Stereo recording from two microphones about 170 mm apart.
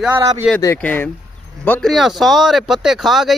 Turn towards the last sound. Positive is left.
turn(degrees=0)  # may be behind; listen again after turning